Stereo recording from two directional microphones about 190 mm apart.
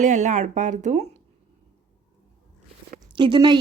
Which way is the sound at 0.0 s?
40° right (ahead or behind).